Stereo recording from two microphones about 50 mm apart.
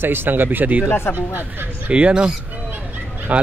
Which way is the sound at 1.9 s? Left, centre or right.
Right.